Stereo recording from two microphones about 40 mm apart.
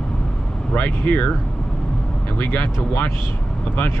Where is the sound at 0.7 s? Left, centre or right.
Left.